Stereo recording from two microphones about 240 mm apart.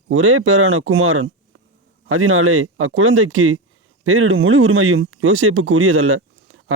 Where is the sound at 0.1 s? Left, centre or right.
Right.